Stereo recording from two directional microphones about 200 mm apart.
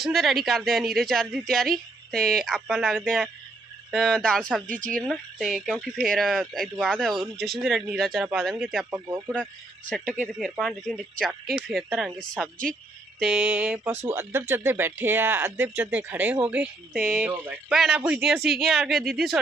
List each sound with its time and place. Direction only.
0.0 s speech: centre (ahead or behind)
4.7 s speech: 40° right (ahead or behind)
4.9 s speech: centre (ahead or behind)